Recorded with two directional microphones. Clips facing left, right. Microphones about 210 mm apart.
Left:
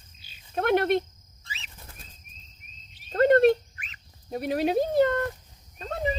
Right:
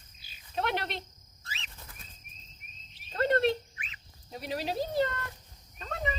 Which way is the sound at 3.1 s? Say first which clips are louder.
Left 8 dB; 50° left (ahead or behind).